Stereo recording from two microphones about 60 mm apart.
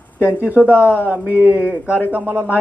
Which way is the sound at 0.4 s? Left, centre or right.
Right.